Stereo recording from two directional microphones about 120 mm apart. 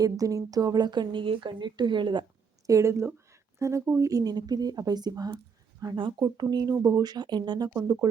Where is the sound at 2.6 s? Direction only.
25° right (ahead or behind).